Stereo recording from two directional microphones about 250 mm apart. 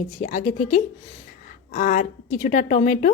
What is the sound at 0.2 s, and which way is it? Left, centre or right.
A woman's voice, left.